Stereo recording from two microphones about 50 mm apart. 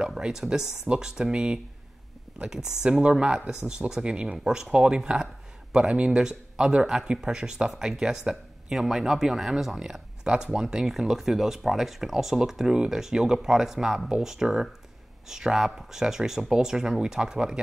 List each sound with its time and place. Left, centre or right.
0.0 s speech: centre
2.9 s speech: right